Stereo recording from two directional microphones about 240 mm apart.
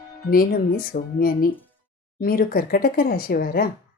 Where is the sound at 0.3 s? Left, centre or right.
Left.